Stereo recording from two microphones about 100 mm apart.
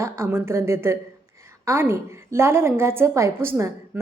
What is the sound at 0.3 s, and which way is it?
A woman's voice, 25° right (ahead or behind).